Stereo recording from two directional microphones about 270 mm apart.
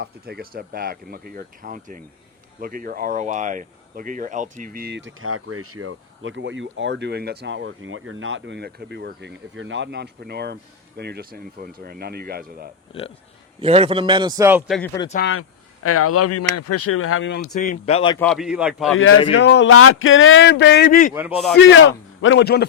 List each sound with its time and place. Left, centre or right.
0.0 s speech: right
13.6 s a man's voice: right
15.2 s speech: left
17.5 s speech: left
18.2 s speech: centre
18.9 s speech: left
21.1 s speech: centre
21.6 s speech: left